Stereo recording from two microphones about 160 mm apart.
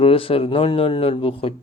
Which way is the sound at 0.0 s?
35° left (ahead or behind).